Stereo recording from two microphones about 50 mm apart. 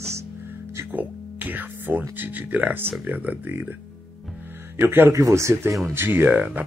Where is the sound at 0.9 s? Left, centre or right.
Right.